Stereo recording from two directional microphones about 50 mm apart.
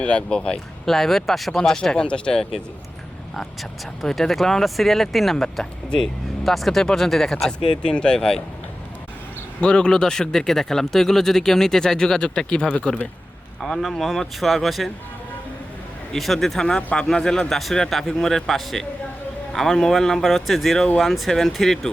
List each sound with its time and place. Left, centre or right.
0.0 s speech: centre
0.9 s speech: centre
3.3 s speech: centre
7.8 s speech: centre
9.6 s speech: centre
13.6 s speech: centre
16.1 s speech: centre
16.6 s speech: centre
17.6 s speech: centre